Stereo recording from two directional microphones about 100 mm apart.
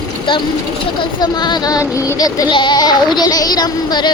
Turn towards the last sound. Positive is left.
turn(degrees=45)  # may be behind; listen again after turning